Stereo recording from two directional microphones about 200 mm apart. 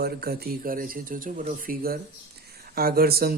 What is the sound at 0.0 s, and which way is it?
Speech, 50° right (ahead or behind).